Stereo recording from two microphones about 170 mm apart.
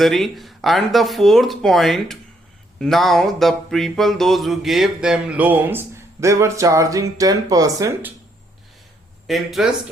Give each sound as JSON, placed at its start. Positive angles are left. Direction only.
{"t": 0.0, "sound": "speech", "side_deg": 0}
{"t": 2.7, "sound": "a sound", "side_deg": 0}
{"t": 9.2, "sound": "speech", "side_deg": 0}